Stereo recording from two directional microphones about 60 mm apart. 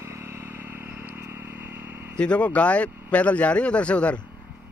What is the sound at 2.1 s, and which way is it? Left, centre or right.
Speech, centre.